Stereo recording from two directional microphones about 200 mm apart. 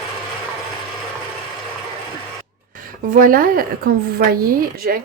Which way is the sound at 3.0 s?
45° right (ahead or behind).